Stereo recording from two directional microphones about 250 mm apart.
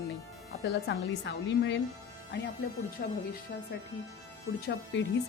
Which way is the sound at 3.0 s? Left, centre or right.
Left.